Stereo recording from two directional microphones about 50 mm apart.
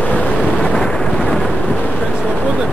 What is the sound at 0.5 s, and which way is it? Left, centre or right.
Thunder, centre.